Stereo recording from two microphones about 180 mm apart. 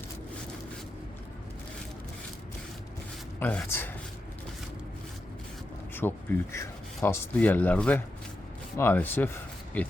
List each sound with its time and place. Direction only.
3.4 s speech: 10° left (ahead or behind)
5.9 s speech: 10° left (ahead or behind)